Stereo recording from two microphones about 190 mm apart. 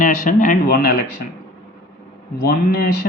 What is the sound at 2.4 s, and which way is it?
Speech, 55° left (ahead or behind).